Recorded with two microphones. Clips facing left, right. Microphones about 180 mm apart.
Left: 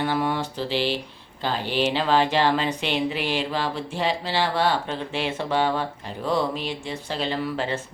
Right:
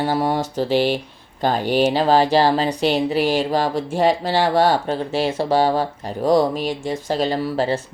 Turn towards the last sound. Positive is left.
turn(degrees=-35)  # may be behind; listen again after turning